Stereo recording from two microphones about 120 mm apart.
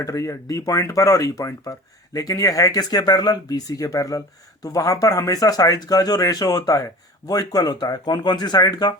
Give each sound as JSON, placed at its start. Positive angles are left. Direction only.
{"t": 0.0, "sound": "speech", "side_deg": 25}